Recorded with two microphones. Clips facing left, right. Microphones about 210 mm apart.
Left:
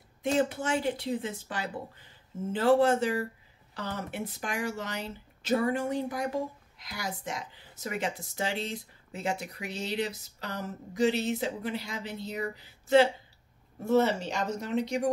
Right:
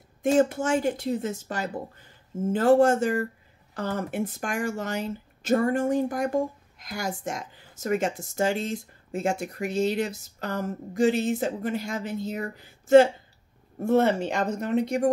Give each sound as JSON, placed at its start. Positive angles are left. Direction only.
{"t": 0.2, "sound": "speech", "side_deg": -45}